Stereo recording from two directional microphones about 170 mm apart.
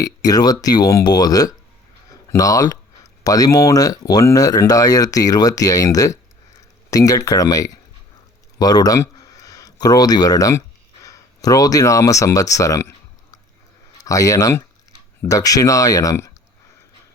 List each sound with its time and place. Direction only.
0.0 s speech: 20° left (ahead or behind)
14.0 s speech: 20° left (ahead or behind)